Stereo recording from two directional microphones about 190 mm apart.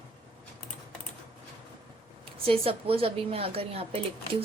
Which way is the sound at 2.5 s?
30° right (ahead or behind).